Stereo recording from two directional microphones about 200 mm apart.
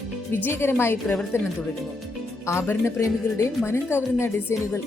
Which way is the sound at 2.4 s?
15° left (ahead or behind).